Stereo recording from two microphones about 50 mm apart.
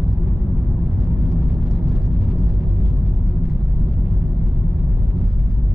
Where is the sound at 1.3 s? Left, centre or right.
Centre.